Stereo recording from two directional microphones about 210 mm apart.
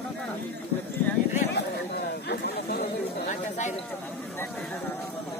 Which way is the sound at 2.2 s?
50° left (ahead or behind).